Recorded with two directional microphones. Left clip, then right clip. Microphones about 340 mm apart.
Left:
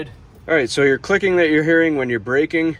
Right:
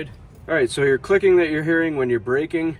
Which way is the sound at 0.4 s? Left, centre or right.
Centre.